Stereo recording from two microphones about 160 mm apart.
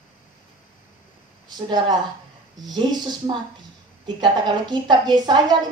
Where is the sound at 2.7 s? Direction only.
25° right (ahead or behind).